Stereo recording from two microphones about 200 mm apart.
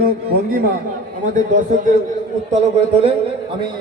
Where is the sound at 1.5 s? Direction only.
40° right (ahead or behind).